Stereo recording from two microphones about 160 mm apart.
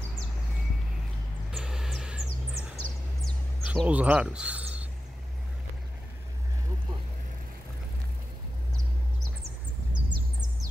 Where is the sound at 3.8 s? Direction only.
10° right (ahead or behind).